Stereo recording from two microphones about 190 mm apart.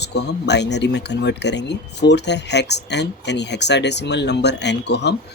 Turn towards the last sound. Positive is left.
turn(degrees=65)  # may be behind; listen again after turning